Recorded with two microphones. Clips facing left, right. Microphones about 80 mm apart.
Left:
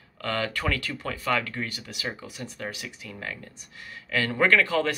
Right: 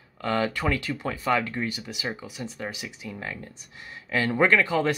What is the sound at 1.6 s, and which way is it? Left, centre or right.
Speech, centre.